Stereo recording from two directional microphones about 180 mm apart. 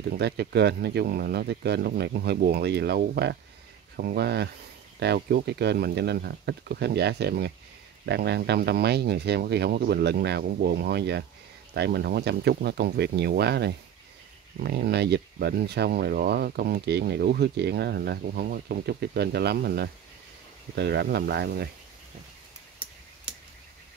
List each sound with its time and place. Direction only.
0.2 s speech: 65° right (ahead or behind)